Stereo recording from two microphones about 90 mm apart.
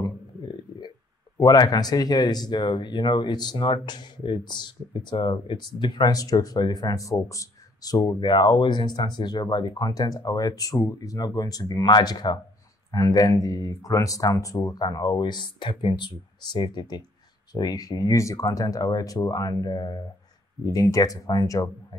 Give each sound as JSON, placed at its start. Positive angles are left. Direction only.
{"t": 1.4, "sound": "speech", "side_deg": 45}
{"t": 17.5, "sound": "speech", "side_deg": 50}